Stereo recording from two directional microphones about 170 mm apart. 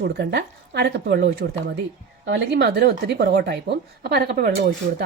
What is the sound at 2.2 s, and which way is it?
Speech, 90° right.